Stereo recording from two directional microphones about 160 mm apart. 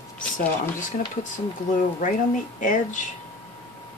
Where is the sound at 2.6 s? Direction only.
50° left (ahead or behind).